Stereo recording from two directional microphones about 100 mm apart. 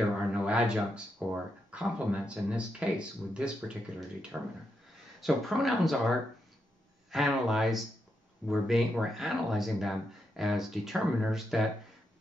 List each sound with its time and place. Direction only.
0.3 s speech: 10° right (ahead or behind)
5.2 s speech: centre (ahead or behind)